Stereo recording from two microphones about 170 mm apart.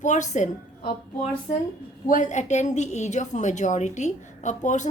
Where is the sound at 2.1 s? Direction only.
45° left (ahead or behind).